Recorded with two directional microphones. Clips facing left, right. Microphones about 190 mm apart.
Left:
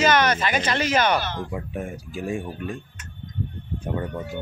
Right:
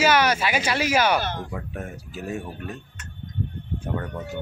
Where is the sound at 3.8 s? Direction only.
10° left (ahead or behind).